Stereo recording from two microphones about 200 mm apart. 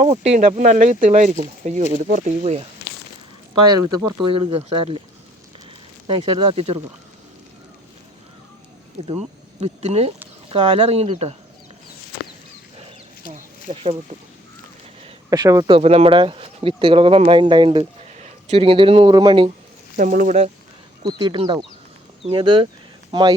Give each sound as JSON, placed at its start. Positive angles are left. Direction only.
{"t": 0.0, "sound": "speech", "side_deg": -30}
{"t": 3.5, "sound": "speech", "side_deg": -20}
{"t": 6.1, "sound": "speech", "side_deg": -25}
{"t": 9.0, "sound": "speech", "side_deg": -30}
{"t": 12.7, "sound": "wild animals", "side_deg": -25}
{"t": 15.3, "sound": "speech", "side_deg": -15}
{"t": 20.0, "sound": "speech", "side_deg": -40}
{"t": 21.0, "sound": "speech", "side_deg": -20}